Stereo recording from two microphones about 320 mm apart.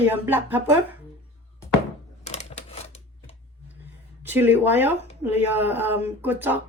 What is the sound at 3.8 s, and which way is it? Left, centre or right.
Speech, centre.